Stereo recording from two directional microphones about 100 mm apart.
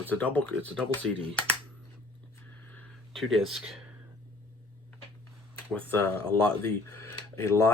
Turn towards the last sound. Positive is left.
turn(degrees=25)  # may be behind; listen again after turning